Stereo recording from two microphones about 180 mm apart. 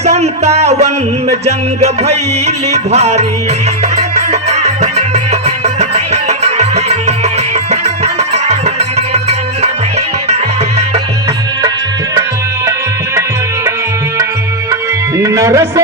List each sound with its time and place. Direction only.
0.0 s music: 35° right (ahead or behind)
15.2 s music: 15° right (ahead or behind)